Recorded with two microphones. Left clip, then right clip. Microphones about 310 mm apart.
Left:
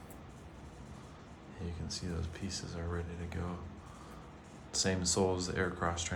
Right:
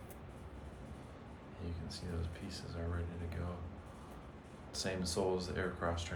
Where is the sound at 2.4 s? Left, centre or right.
Centre.